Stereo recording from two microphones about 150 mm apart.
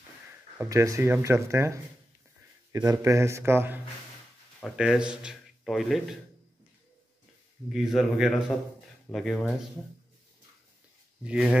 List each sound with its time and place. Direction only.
0.6 s speech: 20° right (ahead or behind); by 6.1 s centre (ahead or behind)
7.7 s speech: centre (ahead or behind)
11.2 s speech: 5° right (ahead or behind)